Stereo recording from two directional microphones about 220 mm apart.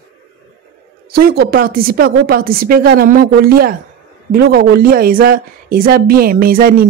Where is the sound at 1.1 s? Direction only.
45° right (ahead or behind).